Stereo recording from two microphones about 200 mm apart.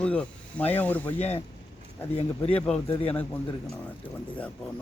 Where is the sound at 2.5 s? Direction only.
10° left (ahead or behind).